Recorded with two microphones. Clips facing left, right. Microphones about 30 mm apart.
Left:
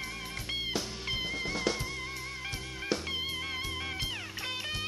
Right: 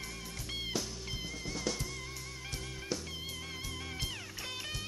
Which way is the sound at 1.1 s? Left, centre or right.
Left.